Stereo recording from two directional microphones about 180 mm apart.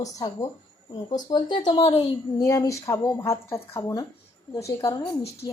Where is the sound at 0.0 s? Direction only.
20° left (ahead or behind).